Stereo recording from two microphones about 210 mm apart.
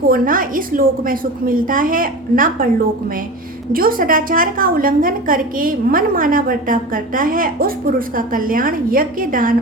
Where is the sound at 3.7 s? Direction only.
45° right (ahead or behind).